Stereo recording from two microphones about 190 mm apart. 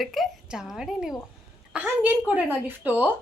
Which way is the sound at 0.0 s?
Centre (ahead or behind).